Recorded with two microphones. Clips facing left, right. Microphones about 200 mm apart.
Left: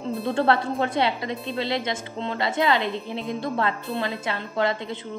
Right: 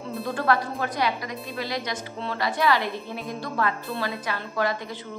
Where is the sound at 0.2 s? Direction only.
25° left (ahead or behind).